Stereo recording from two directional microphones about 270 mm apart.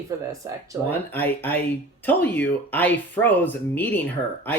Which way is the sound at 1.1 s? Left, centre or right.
Centre.